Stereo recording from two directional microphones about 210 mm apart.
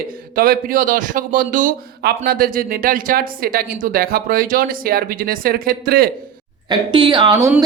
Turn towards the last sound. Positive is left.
turn(degrees=-20)  # may be behind; listen again after turning